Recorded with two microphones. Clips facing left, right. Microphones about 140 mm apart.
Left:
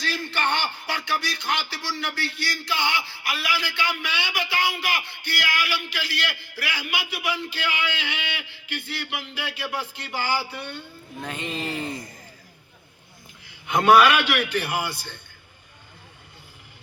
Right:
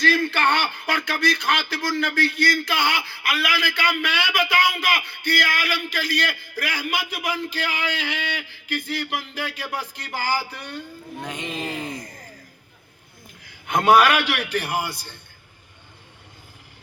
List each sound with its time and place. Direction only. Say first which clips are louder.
0.1 s a man's voice: right 2 dB; 50° right (ahead or behind)
11.2 s speech: even; 15° right (ahead or behind)
13.4 s a man's voice: even; 45° right (ahead or behind)